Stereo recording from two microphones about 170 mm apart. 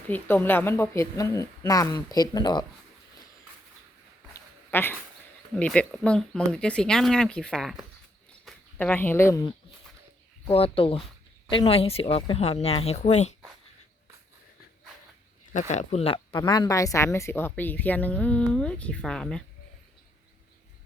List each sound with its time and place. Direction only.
0.1 s a woman's voice: 10° left (ahead or behind)
4.4 s a sound: 10° left (ahead or behind)
5.5 s speech: 5° left (ahead or behind)
10.5 s speech: 35° left (ahead or behind)
15.5 s a woman's voice: 45° left (ahead or behind); by 19.4 s 5° left (ahead or behind)